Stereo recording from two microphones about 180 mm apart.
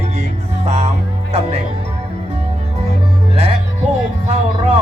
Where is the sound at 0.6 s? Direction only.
35° right (ahead or behind).